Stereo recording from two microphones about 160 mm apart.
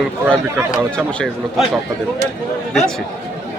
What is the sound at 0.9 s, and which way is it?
Speech, 5° left (ahead or behind).